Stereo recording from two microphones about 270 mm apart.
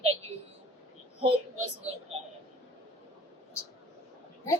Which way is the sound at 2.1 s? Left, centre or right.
Right.